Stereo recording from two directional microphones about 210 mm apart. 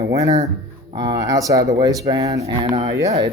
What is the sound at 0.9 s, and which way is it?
Speech, 20° right (ahead or behind).